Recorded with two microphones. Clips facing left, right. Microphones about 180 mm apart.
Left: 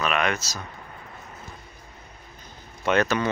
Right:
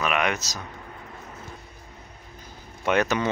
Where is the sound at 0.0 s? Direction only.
15° right (ahead or behind).